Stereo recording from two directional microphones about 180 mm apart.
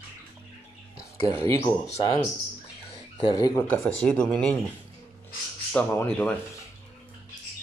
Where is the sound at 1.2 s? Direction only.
15° left (ahead or behind).